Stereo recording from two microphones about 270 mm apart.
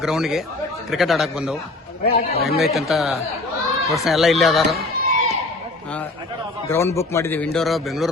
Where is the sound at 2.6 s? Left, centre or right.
Centre.